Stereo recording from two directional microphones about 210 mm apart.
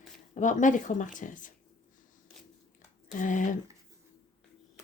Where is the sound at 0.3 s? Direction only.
35° left (ahead or behind).